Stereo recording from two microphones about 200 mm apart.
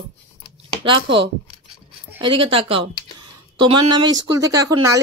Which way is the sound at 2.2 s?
25° right (ahead or behind).